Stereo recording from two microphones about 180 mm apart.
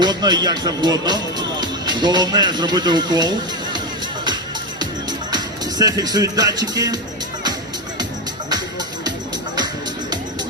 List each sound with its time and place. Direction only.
0.0 s speech: 25° right (ahead or behind)
5.3 s speech: 20° right (ahead or behind)